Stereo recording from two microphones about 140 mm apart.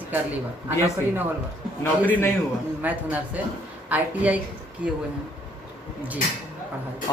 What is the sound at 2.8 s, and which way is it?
A man's voice, 10° right (ahead or behind).